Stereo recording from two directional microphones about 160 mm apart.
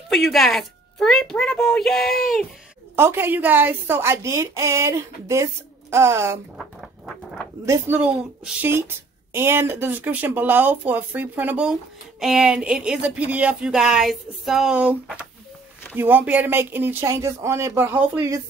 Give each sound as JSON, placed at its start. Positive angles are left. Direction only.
{"t": 0.1, "sound": "a woman's voice", "side_deg": 0}
{"t": 3.0, "sound": "speech", "side_deg": -15}
{"t": 6.6, "sound": "a sound", "side_deg": 0}
{"t": 7.6, "sound": "speech", "side_deg": -20}